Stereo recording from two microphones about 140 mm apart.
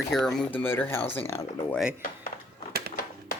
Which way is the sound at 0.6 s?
15° left (ahead or behind).